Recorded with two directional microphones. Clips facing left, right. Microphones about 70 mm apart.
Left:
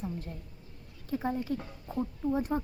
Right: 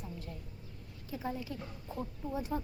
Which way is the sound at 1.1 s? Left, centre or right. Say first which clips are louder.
Left 7 dB; left.